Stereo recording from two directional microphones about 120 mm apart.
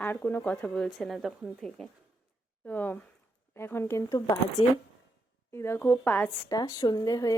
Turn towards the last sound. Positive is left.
turn(degrees=30)  # may be behind; listen again after turning